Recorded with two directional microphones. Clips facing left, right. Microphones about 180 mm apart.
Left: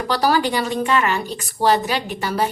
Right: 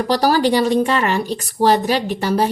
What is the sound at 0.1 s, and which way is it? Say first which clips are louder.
Speech: right 3 dB; 40° right (ahead or behind).